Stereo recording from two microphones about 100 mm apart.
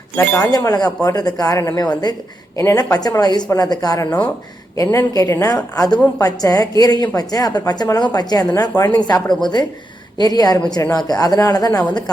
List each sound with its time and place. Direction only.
0.5 s speech: 40° left (ahead or behind)
2.6 s speech: 35° left (ahead or behind)
4.7 s speech: 30° left (ahead or behind)
9.2 s a woman's voice: 5° left (ahead or behind)
10.2 s speech: 40° left (ahead or behind)